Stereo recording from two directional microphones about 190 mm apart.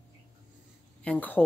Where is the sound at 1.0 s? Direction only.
10° left (ahead or behind).